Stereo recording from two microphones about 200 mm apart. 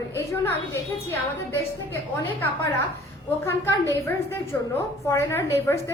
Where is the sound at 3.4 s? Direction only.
15° left (ahead or behind).